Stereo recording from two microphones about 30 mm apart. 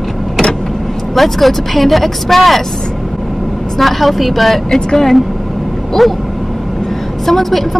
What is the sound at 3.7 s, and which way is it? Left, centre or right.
Speech, centre.